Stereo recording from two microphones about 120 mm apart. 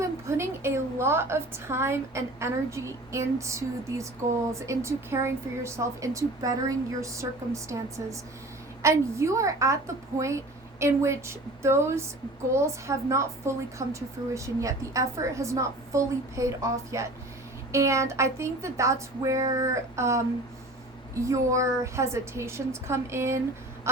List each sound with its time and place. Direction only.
0.0 s a woman's voice: 20° right (ahead or behind)